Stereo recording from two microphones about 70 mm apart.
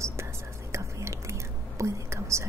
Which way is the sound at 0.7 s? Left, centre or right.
Right.